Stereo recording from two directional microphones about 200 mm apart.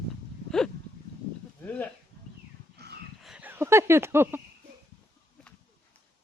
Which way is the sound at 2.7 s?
55° right (ahead or behind).